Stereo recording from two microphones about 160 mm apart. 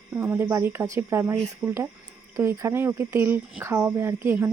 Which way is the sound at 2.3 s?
20° right (ahead or behind).